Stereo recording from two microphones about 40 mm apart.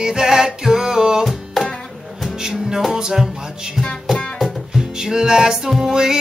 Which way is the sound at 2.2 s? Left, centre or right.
Centre.